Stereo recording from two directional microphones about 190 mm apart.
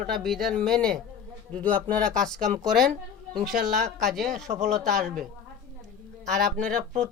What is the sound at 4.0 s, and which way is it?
Speech, centre (ahead or behind).